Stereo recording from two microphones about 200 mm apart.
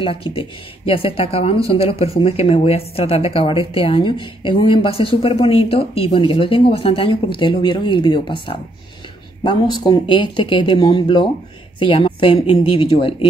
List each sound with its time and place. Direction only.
0.0 s speech: 25° left (ahead or behind)